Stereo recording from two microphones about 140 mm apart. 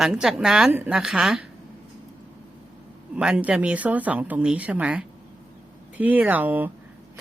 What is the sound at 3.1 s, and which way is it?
Speech, 10° right (ahead or behind).